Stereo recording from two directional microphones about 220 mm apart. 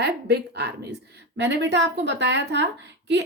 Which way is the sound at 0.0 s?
50° right (ahead or behind).